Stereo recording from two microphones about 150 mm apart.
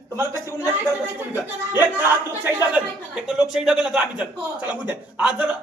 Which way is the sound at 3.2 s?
5° right (ahead or behind).